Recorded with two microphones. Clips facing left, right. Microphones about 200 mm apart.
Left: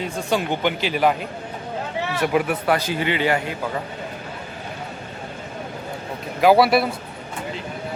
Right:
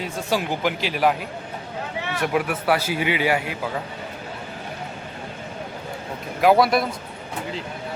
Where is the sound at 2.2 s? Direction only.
Centre (ahead or behind).